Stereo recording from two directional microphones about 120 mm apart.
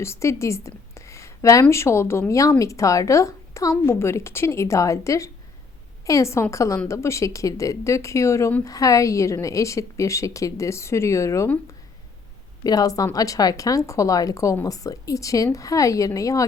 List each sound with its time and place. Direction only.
0.0 s a woman's voice: 25° left (ahead or behind)
12.6 s a woman's voice: 30° left (ahead or behind)